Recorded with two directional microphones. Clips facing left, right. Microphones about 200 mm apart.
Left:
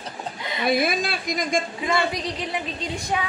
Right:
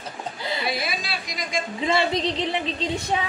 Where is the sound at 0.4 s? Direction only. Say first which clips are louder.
Right 1 dB; 30° right (ahead or behind).